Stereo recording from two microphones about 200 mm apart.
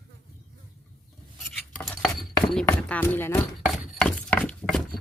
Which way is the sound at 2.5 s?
5° left (ahead or behind).